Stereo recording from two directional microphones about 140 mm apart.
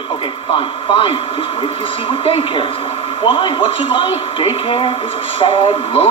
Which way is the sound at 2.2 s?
40° left (ahead or behind).